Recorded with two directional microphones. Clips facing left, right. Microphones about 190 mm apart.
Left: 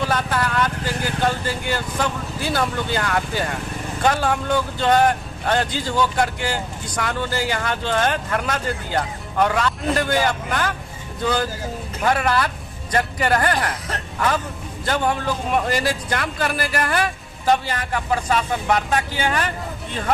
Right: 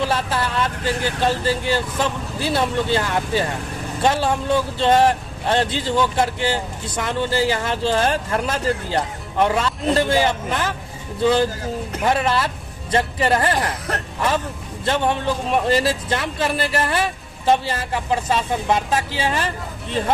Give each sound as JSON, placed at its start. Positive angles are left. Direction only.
{"t": 0.0, "sound": "speech", "side_deg": -30}
{"t": 15.0, "sound": "speech", "side_deg": -25}